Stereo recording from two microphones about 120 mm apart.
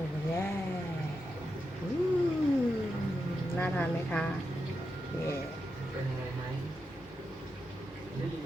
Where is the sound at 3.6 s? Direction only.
15° left (ahead or behind).